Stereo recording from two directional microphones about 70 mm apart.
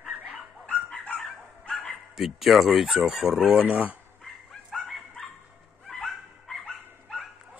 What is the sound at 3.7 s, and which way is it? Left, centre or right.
Speech, right.